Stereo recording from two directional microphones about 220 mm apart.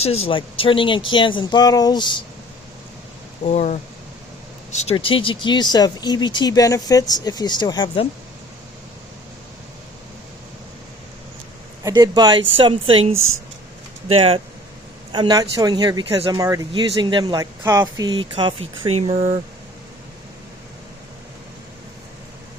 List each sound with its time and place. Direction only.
0.0 s speech: 25° left (ahead or behind)
3.4 s speech: 35° left (ahead or behind)
11.8 s speech: 15° right (ahead or behind)